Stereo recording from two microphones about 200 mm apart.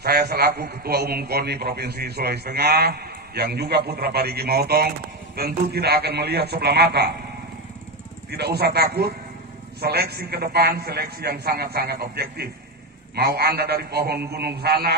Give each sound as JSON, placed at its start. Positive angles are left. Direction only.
{"t": 0.0, "sound": "a man's voice", "side_deg": -50}
{"t": 8.3, "sound": "a man's voice", "side_deg": -55}